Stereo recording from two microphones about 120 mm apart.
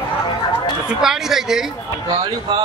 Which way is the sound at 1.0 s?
5° right (ahead or behind).